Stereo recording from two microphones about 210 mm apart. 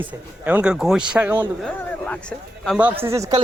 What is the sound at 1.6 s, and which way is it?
Speech, 5° left (ahead or behind).